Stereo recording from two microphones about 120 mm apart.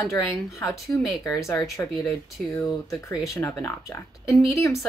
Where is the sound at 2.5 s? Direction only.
Centre (ahead or behind).